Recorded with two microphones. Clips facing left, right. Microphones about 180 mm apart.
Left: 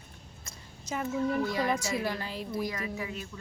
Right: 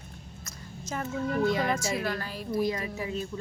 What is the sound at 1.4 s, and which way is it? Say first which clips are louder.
Speech: right 4 dB; 20° right (ahead or behind).